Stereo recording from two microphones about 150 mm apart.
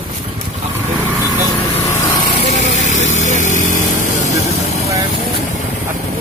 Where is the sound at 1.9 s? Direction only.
55° left (ahead or behind).